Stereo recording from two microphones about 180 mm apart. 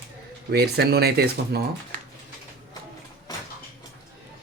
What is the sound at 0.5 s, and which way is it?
Speech, 65° right (ahead or behind).